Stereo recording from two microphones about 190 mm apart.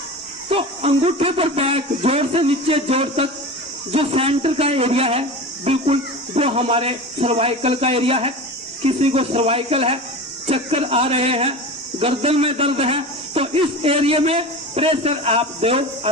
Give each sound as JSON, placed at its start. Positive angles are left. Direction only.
{"t": 0.5, "sound": "a man's voice", "side_deg": -30}